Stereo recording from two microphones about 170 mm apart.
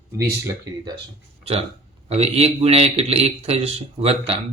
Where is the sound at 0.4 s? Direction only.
20° right (ahead or behind).